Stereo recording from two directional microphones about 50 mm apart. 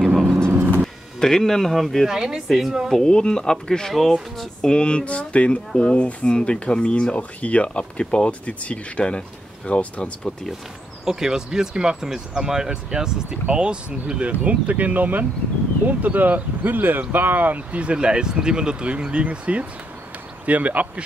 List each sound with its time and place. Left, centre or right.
0.0 s vehicle: centre
0.5 s vehicle: right
1.2 s speech: centre
2.0 s speech: centre
3.1 s speech: centre
3.9 s speech: centre
4.6 s speech: centre
11.1 s speech: centre; by 17.6 s right
17.7 s speech: right